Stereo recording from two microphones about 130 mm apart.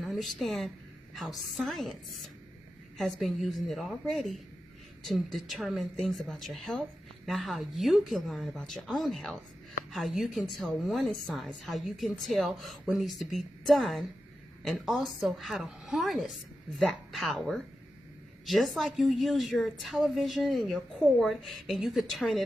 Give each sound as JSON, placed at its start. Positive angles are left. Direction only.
{"t": 0.0, "sound": "a woman's voice", "side_deg": 0}
{"t": 3.0, "sound": "speech", "side_deg": 0}